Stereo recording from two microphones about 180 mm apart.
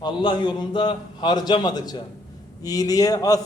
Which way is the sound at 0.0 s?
25° left (ahead or behind).